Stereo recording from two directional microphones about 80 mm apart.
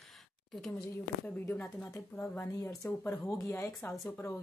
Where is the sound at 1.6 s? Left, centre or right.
Left.